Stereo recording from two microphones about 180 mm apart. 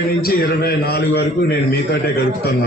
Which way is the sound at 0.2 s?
60° left (ahead or behind).